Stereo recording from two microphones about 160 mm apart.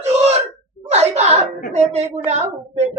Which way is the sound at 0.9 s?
45° right (ahead or behind).